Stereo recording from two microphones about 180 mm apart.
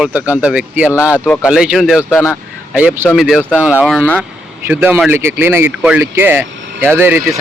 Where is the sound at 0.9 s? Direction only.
15° left (ahead or behind).